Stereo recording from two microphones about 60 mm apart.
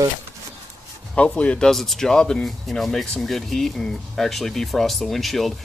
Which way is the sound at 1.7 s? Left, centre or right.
Centre.